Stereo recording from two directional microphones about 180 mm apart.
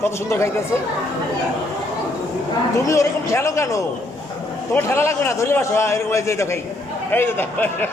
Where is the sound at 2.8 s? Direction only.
15° left (ahead or behind).